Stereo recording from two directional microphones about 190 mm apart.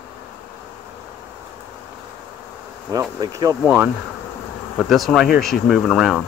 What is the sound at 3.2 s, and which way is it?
Speech, 20° right (ahead or behind).